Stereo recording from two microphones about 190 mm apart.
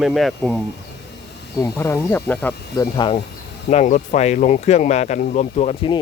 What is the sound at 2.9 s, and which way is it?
Speech, 25° left (ahead or behind).